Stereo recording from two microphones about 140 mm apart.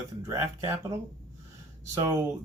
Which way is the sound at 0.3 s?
25° right (ahead or behind).